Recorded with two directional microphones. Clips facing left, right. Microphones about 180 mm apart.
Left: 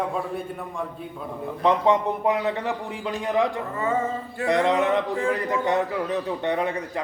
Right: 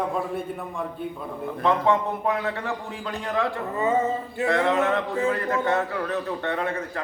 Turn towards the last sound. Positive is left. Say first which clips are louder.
# left 2 dB
turn(degrees=15)  # may be behind; listen again after turning